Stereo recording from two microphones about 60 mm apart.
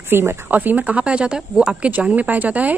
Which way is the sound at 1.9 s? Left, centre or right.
Right.